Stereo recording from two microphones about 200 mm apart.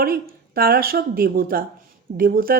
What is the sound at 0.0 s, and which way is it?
Speech, 50° right (ahead or behind).